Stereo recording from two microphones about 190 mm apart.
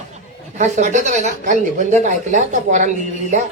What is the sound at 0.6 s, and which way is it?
Speech, 40° right (ahead or behind).